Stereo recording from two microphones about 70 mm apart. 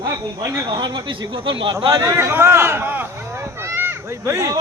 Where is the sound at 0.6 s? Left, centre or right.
Right.